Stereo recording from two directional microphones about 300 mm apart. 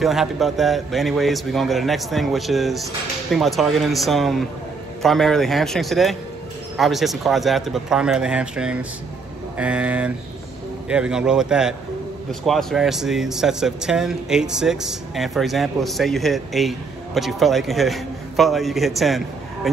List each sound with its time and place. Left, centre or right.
0.0 s speech: centre